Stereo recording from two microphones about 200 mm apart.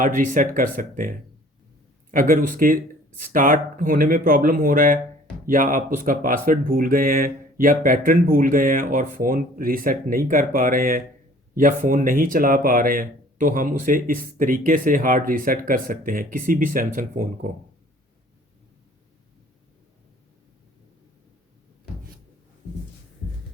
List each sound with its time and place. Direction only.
0.0 s speech: 45° right (ahead or behind)